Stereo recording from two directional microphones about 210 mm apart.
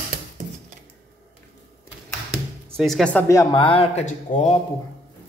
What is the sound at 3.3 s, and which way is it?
Speech, 20° left (ahead or behind).